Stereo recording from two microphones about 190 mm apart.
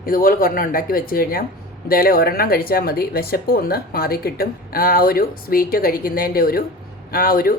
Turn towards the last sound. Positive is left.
turn(degrees=50)  # may be behind; listen again after turning